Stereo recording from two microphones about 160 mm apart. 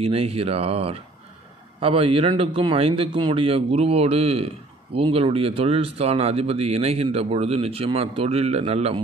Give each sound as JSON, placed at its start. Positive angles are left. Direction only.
{"t": 0.0, "sound": "speech", "side_deg": -40}